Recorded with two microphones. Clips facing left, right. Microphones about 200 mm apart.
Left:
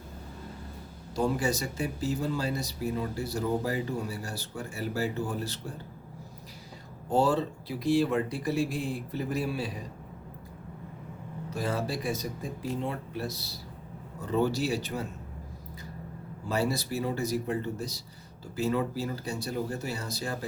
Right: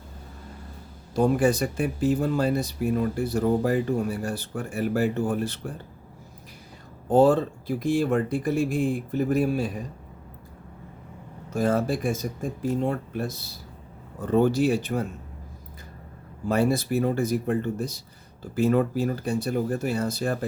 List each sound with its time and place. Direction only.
1.1 s speech: 55° right (ahead or behind)
7.1 s speech: 50° right (ahead or behind)
11.5 s speech: 50° right (ahead or behind)
16.5 s speech: 55° right (ahead or behind)